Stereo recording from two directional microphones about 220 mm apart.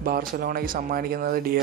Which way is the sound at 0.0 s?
40° right (ahead or behind).